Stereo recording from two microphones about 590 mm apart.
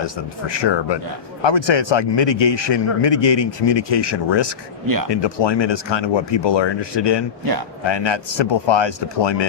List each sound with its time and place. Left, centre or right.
0.0 s a man's voice: left